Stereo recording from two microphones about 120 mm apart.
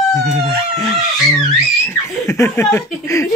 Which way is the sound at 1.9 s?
25° left (ahead or behind).